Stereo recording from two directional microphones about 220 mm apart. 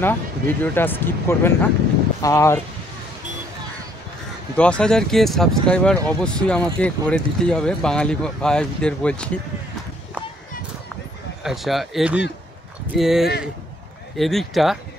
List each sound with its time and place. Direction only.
0.0 s speech: 10° left (ahead or behind)
4.6 s speech: 5° left (ahead or behind)
11.4 s speech: centre (ahead or behind)